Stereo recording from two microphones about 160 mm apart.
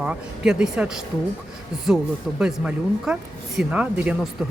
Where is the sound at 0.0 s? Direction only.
5° right (ahead or behind).